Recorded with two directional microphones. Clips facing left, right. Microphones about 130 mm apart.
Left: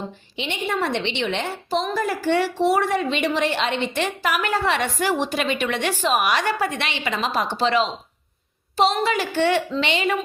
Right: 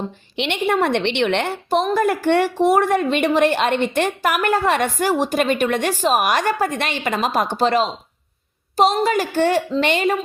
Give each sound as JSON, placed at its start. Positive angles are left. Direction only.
{"t": 0.3, "sound": "a woman's voice", "side_deg": -70}